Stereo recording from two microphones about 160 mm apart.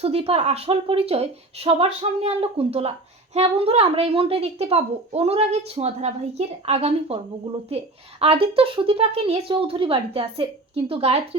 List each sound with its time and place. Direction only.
0.0 s speech: 40° right (ahead or behind)